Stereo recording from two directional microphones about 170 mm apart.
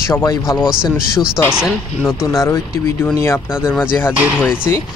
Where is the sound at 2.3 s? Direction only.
15° left (ahead or behind).